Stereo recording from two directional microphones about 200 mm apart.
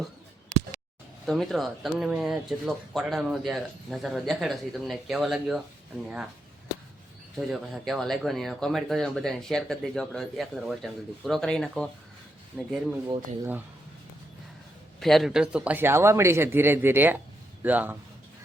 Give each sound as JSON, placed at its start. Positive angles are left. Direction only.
{"t": 1.3, "sound": "speech", "side_deg": 0}
{"t": 7.3, "sound": "speech", "side_deg": 0}
{"t": 13.1, "sound": "speech", "side_deg": -15}
{"t": 15.0, "sound": "speech", "side_deg": 0}